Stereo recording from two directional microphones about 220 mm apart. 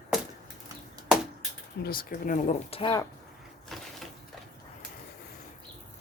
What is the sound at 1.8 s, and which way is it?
Speech, 40° left (ahead or behind).